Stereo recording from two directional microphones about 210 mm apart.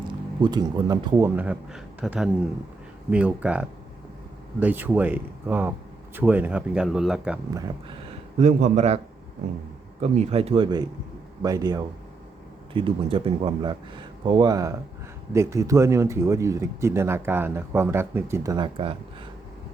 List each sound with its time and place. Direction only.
0.4 s speech: 20° right (ahead or behind); by 7.3 s 5° right (ahead or behind)
7.5 s speech: 20° right (ahead or behind)
8.4 s a man's voice: 35° right (ahead or behind)
10.0 s speech: 30° right (ahead or behind)